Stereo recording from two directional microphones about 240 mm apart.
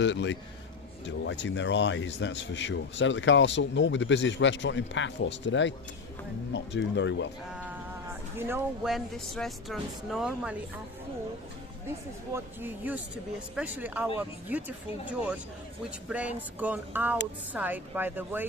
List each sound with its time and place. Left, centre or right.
0.0 s speech: left
7.5 s a sound: centre
8.4 s speech: centre
12.3 s speech: centre
16.0 s speech: centre